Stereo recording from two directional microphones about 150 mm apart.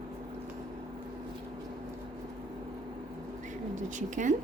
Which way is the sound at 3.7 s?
55° right (ahead or behind).